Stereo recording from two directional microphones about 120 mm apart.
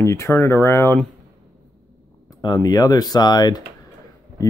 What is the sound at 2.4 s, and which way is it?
Speech, 30° left (ahead or behind).